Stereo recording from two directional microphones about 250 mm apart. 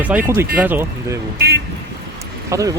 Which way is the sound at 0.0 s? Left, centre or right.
Centre.